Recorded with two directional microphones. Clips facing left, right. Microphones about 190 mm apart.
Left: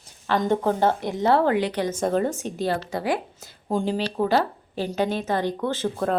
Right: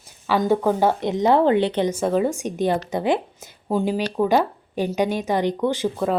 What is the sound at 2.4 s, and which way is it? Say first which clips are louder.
A woman's voice: right 4 dB; 15° right (ahead or behind).